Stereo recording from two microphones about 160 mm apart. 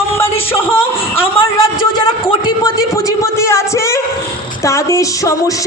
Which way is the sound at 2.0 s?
30° left (ahead or behind).